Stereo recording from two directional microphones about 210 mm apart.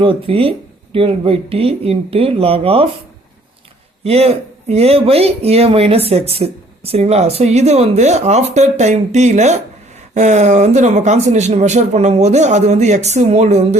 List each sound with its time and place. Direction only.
0.0 s speech: 25° right (ahead or behind)
4.0 s speech: 30° right (ahead or behind)